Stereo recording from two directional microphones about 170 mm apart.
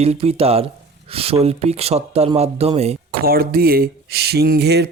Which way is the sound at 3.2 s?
60° right (ahead or behind).